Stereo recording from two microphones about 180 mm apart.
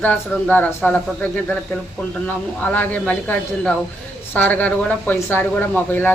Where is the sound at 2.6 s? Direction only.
10° left (ahead or behind).